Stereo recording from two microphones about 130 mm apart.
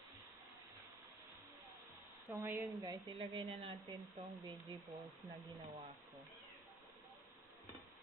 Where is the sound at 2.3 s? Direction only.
15° right (ahead or behind).